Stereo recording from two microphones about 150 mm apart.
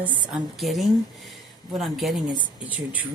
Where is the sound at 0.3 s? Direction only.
Centre (ahead or behind).